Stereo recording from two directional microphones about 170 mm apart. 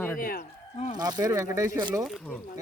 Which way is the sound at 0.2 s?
55° left (ahead or behind).